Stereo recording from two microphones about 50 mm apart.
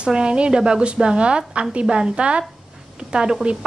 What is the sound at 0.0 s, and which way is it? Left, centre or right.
A woman's voice, centre.